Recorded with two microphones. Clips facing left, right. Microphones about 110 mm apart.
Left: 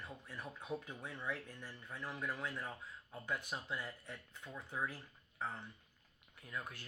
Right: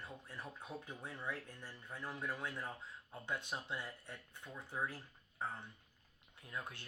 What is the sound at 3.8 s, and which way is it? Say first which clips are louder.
Speech: left 1 dB; 15° right (ahead or behind).